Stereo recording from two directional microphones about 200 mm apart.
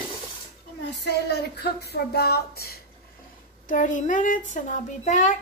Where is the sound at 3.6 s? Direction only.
40° left (ahead or behind).